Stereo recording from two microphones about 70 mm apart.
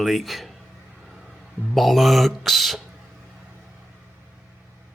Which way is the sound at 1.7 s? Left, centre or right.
Centre.